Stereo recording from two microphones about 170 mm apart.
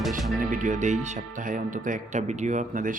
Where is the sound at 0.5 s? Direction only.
50° right (ahead or behind).